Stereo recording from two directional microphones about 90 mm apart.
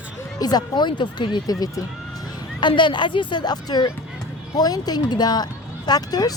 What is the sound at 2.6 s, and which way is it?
Speech, 60° left (ahead or behind).